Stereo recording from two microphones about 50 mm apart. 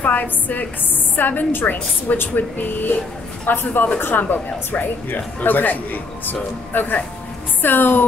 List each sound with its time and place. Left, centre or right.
0.0 s speech: left